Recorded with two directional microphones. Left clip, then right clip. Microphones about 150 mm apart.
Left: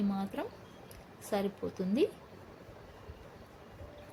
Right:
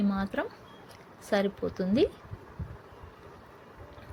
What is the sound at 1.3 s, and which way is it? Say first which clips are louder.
Speech: right 6 dB; 20° right (ahead or behind).